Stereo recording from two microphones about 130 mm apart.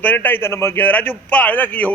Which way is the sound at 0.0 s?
15° left (ahead or behind).